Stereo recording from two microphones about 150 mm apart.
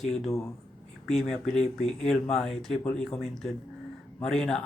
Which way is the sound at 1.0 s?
Centre (ahead or behind).